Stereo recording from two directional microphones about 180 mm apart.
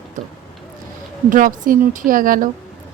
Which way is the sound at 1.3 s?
50° right (ahead or behind).